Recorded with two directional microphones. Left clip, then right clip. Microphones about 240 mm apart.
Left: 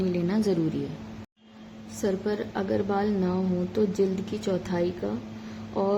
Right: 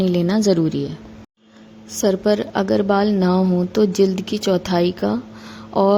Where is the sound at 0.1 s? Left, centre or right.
Right.